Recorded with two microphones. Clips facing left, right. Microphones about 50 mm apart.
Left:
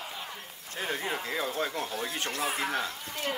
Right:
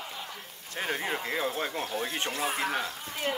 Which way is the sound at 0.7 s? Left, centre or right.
Right.